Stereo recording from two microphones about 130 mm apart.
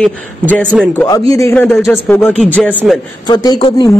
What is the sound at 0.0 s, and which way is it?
A man's voice, 5° left (ahead or behind).